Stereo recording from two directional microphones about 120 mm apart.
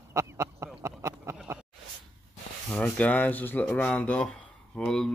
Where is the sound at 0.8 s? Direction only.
25° right (ahead or behind).